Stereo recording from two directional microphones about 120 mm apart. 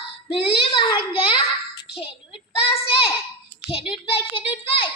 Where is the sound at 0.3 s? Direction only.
50° left (ahead or behind).